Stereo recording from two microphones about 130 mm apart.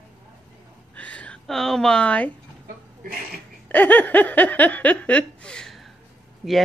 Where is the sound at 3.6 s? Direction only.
15° left (ahead or behind).